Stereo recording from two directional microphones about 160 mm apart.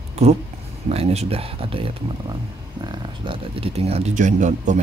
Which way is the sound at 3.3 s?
35° right (ahead or behind).